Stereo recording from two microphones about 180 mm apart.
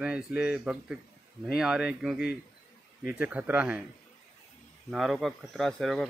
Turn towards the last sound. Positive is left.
turn(degrees=0)  # may be behind; listen again after turning